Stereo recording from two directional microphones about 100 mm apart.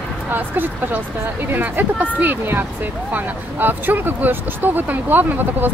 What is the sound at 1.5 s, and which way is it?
Speech, 15° right (ahead or behind).